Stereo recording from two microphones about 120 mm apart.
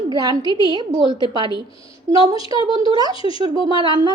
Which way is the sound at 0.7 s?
35° right (ahead or behind).